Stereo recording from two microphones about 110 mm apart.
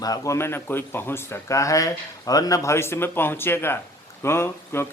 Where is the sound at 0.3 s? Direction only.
20° left (ahead or behind).